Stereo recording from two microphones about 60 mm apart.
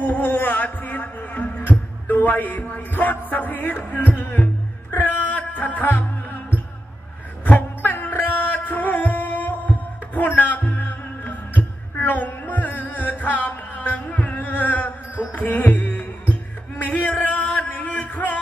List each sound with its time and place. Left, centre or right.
0.0 s heart sounds: left
4.9 s music: left